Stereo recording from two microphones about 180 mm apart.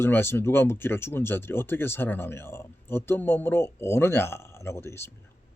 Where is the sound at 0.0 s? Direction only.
10° left (ahead or behind).